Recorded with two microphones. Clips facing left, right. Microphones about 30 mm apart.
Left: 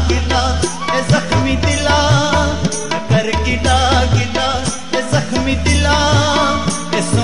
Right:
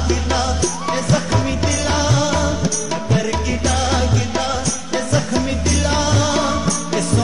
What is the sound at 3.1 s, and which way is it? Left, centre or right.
Music, left.